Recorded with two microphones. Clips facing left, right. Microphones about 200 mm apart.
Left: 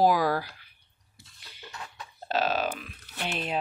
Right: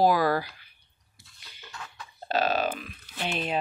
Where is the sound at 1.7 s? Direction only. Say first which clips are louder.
Left 1 dB; 20° left (ahead or behind).